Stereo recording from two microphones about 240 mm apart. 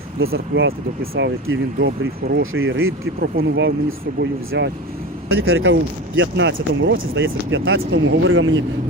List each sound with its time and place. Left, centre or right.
0.3 s speech: right